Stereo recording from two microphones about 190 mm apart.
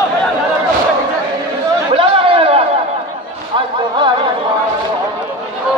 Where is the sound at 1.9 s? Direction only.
30° right (ahead or behind).